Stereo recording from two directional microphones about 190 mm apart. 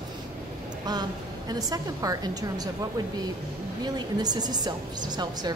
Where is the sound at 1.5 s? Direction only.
20° right (ahead or behind).